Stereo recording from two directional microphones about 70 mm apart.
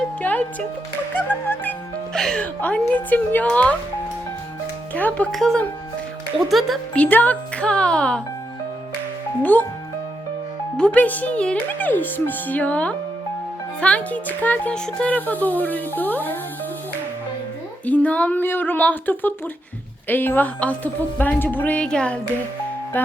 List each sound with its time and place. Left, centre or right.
0.2 s speech: left
2.1 s speech: centre
2.4 s speech: centre
4.9 s speech: left
5.3 s speech: centre
6.9 s speech: left
9.4 s speech: left
10.8 s speech: centre
11.8 s speech: left
17.8 s speech: left
22.9 s speech: left